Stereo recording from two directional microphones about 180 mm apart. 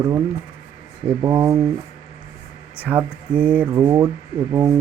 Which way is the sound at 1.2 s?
20° right (ahead or behind).